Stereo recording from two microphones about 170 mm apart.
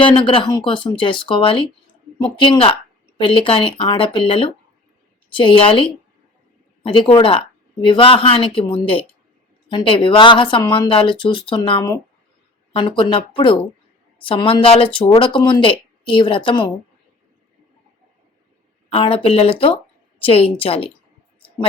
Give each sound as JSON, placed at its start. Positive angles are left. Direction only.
{"t": 0.0, "sound": "a woman's voice", "side_deg": 30}
{"t": 18.9, "sound": "a woman's voice", "side_deg": 30}